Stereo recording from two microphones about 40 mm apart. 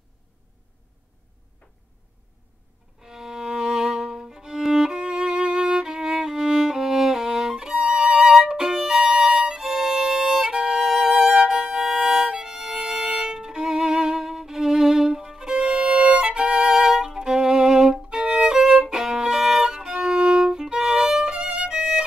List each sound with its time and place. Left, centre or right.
3.0 s music: centre
5.0 s music: right
5.9 s music: centre
8.5 s violin: right
8.7 s violin: centre
15.9 s music: right
16.4 s violin: centre